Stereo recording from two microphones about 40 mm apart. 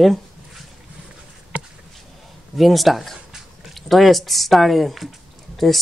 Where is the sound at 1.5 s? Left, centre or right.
Right.